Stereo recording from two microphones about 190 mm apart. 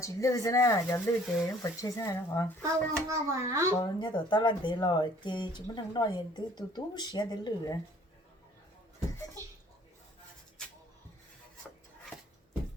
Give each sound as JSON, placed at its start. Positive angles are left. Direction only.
{"t": 0.0, "sound": "speech", "side_deg": 15}
{"t": 2.6, "sound": "a child's voice", "side_deg": -15}
{"t": 3.8, "sound": "speech", "side_deg": 20}